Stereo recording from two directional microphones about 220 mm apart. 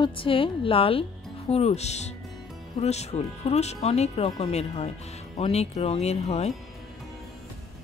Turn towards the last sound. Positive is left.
turn(degrees=30)  # may be behind; listen again after turning